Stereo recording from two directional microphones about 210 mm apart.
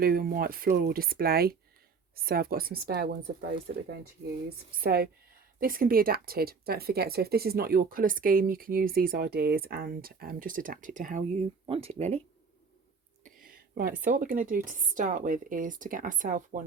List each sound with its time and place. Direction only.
0.0 s speech: 45° right (ahead or behind)
11.6 s speech: 25° right (ahead or behind)
13.2 s a sound: 40° right (ahead or behind)
14.0 s speech: 40° right (ahead or behind)